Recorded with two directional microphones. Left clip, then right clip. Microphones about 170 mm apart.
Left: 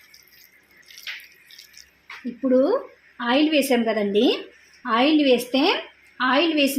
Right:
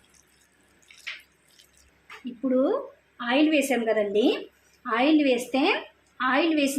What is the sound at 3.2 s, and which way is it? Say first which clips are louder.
A woman's voice: left 3 dB; 60° left (ahead or behind).